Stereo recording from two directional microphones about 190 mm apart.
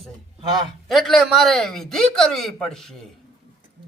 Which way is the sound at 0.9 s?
Centre (ahead or behind).